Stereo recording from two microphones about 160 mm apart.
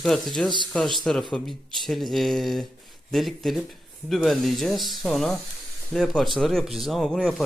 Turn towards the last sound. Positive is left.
turn(degrees=0)  # may be behind; listen again after turning